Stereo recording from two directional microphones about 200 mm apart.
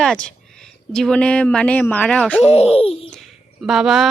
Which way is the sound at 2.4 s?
30° left (ahead or behind).